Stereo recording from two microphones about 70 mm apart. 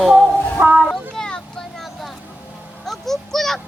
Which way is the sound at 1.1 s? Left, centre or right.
Centre.